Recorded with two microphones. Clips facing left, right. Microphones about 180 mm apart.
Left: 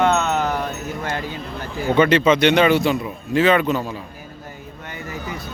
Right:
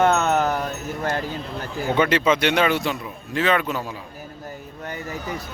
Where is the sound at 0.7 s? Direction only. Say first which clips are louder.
Even; 40° right (ahead or behind).